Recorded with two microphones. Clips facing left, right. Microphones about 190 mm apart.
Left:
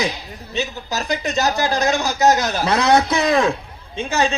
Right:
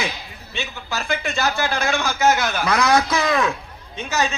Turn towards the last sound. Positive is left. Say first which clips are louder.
# left 4 dB
turn(degrees=30)  # may be behind; listen again after turning